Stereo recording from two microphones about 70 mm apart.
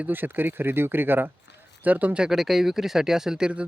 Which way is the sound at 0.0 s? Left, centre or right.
Right.